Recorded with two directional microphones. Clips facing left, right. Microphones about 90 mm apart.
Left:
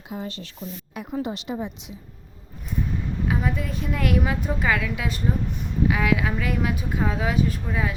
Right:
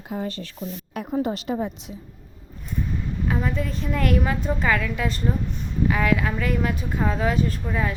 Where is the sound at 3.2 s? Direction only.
5° left (ahead or behind).